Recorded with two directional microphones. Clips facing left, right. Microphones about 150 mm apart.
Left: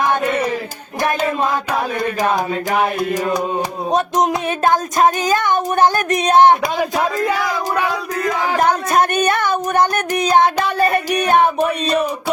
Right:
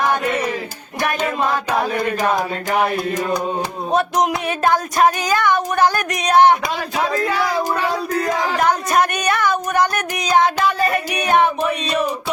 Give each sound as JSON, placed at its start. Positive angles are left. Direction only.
{"t": 3.9, "sound": "speech", "side_deg": 20}
{"t": 8.9, "sound": "speech", "side_deg": 30}
{"t": 10.7, "sound": "music", "side_deg": 30}